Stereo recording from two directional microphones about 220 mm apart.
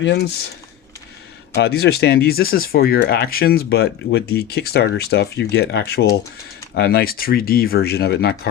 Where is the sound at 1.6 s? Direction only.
50° left (ahead or behind).